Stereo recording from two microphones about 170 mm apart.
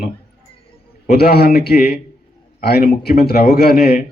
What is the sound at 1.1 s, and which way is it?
Speech, 65° left (ahead or behind).